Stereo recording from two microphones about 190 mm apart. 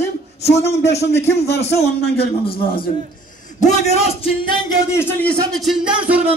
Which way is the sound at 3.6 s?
35° left (ahead or behind).